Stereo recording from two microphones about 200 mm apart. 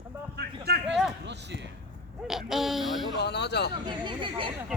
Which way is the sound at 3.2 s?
55° left (ahead or behind).